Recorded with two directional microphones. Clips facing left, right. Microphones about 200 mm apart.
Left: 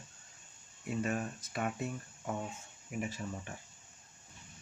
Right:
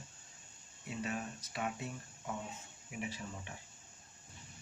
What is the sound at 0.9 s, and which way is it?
Speech, 50° left (ahead or behind).